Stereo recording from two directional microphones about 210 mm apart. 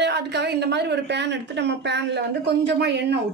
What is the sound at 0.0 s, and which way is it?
Speech, 55° right (ahead or behind).